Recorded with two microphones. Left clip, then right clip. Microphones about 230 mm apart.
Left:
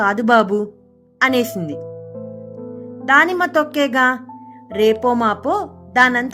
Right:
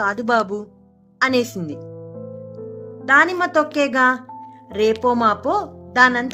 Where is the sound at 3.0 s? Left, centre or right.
Left.